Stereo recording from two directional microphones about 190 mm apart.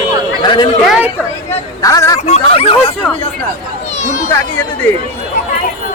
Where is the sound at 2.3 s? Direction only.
30° left (ahead or behind).